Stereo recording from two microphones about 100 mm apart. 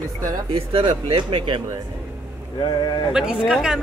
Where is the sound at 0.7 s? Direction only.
60° right (ahead or behind).